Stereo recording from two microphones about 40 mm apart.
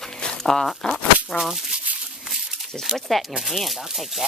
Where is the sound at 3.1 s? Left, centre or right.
Centre.